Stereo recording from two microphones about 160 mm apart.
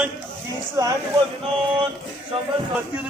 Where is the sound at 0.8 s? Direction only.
25° right (ahead or behind).